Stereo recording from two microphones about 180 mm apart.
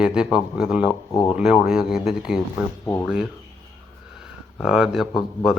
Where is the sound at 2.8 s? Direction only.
15° left (ahead or behind).